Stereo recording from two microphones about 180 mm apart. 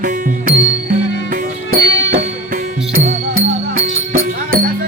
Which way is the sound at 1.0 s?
90° left.